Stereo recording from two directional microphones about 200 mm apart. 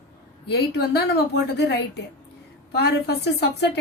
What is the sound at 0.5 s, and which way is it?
Speech, 55° left (ahead or behind).